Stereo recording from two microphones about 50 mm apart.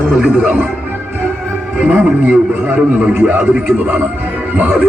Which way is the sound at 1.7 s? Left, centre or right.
Right.